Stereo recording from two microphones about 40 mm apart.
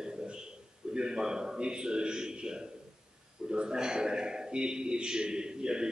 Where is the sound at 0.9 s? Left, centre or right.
Centre.